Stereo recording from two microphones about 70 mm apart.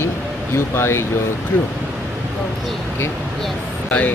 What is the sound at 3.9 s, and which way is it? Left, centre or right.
Speech, left.